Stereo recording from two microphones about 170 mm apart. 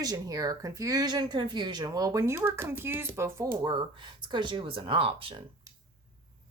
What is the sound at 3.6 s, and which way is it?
Speech, 30° right (ahead or behind).